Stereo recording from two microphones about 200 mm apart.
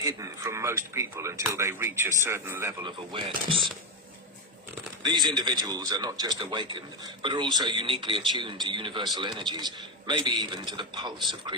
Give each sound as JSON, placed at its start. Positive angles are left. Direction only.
{"t": 0.0, "sound": "speech", "side_deg": -15}
{"t": 2.8, "sound": "speech", "side_deg": -25}
{"t": 4.7, "sound": "speech", "side_deg": -20}